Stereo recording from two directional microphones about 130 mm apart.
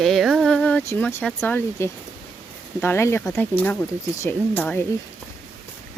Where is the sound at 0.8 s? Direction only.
20° left (ahead or behind).